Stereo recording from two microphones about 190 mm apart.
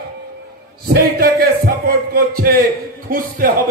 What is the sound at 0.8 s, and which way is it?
A man's voice, 55° right (ahead or behind).